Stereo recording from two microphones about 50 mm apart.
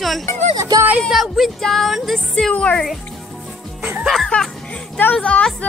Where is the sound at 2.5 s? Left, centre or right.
Left.